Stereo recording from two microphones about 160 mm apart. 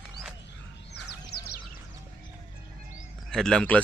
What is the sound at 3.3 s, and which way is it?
Speech, 5° left (ahead or behind).